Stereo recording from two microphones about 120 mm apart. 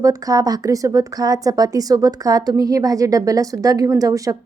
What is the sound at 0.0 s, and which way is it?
A woman's voice, 30° right (ahead or behind).